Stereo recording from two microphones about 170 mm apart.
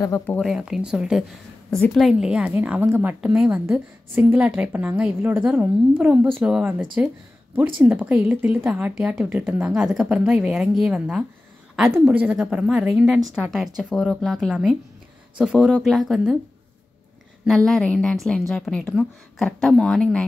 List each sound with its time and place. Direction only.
0.0 s speech: 15° left (ahead or behind)
0.4 s a woman's voice: centre (ahead or behind)
17.5 s a woman's voice: centre (ahead or behind)